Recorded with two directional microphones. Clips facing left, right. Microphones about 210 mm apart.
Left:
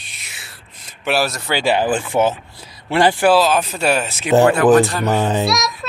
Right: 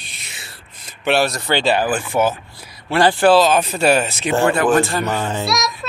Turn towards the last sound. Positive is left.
turn(degrees=0)  # may be behind; listen again after turning